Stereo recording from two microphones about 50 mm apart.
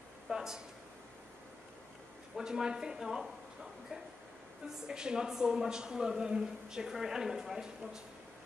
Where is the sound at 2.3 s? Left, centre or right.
Centre.